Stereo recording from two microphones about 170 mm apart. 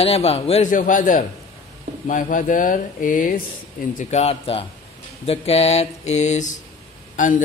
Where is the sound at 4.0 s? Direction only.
40° left (ahead or behind).